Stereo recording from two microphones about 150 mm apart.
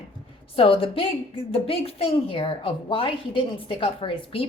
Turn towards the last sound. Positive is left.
turn(degrees=35)  # may be behind; listen again after turning